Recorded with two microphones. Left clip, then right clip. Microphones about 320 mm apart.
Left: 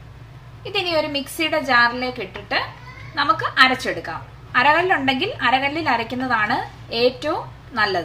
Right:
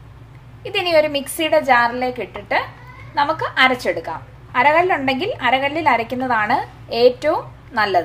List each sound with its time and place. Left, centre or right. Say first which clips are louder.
0.7 s a woman's voice: right 5 dB; right